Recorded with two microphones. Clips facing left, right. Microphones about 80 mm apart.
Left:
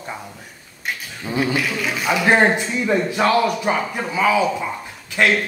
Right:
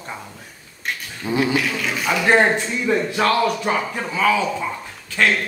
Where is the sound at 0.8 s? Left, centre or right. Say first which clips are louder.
Even; centre.